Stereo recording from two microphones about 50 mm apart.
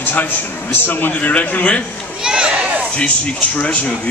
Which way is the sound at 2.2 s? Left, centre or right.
Centre.